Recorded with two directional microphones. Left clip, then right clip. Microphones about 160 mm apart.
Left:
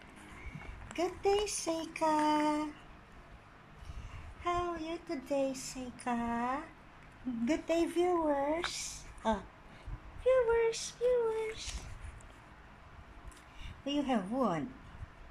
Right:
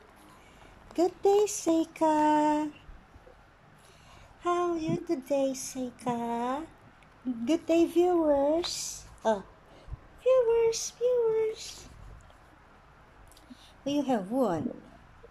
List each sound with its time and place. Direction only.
0.9 s speech: 20° right (ahead or behind)
4.4 s speech: 20° right (ahead or behind)
10.2 s a sound: 15° right (ahead or behind)
13.8 s speech: 15° right (ahead or behind)